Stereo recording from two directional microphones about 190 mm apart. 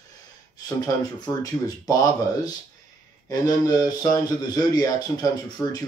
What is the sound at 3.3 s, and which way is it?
Speech, 20° left (ahead or behind).